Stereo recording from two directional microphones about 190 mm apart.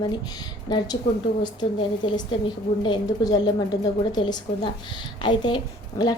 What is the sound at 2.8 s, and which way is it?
A woman's voice, 20° left (ahead or behind).